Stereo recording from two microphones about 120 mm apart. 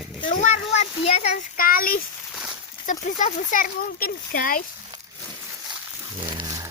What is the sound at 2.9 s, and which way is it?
Speech, 90° left.